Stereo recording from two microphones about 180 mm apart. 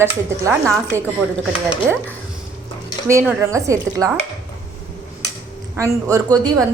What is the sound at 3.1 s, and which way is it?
Speech, 15° right (ahead or behind).